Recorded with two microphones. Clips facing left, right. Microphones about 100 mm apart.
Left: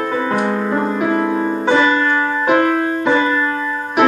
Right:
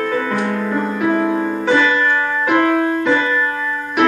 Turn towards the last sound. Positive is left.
turn(degrees=20)  # may be behind; listen again after turning